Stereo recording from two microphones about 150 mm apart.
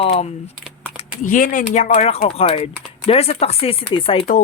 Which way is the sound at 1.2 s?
65° left (ahead or behind).